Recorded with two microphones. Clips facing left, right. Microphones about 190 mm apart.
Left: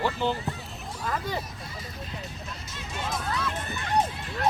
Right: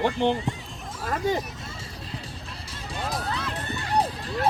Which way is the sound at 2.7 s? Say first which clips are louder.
Right 2 dB; 35° right (ahead or behind).